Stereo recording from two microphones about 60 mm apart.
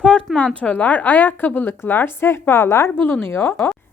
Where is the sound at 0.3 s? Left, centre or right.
Left.